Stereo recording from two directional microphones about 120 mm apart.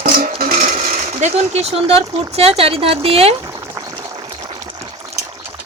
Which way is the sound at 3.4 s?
25° right (ahead or behind).